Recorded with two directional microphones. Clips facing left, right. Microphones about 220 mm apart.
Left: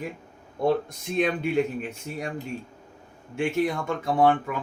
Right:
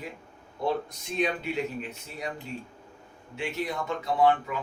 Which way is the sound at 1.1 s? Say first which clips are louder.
Left 5 dB; 50° left (ahead or behind).